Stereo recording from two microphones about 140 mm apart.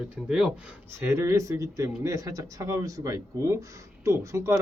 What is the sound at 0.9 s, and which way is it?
Speech, 20° right (ahead or behind).